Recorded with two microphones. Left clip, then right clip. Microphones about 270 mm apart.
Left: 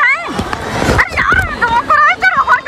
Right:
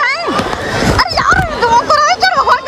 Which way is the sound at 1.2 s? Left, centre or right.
Centre.